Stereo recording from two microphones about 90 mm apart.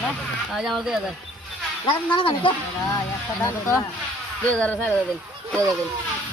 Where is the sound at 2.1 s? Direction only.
65° left (ahead or behind).